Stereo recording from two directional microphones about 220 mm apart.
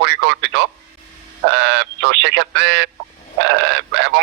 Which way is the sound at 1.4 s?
55° right (ahead or behind).